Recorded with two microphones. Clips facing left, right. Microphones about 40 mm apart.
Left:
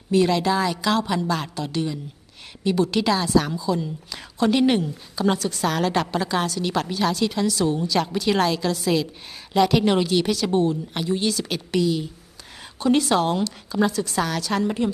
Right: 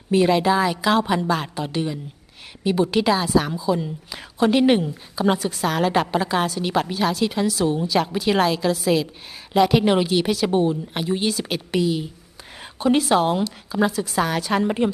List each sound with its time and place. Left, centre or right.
0.1 s a woman's voice: centre